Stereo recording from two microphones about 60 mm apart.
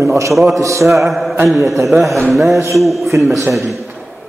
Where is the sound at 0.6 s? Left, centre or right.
Right.